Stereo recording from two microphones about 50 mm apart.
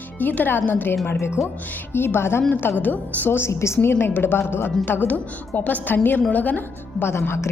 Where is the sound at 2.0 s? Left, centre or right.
Left.